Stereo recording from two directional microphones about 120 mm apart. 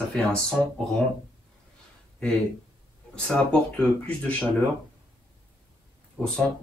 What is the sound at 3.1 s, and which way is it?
Speech, 5° left (ahead or behind).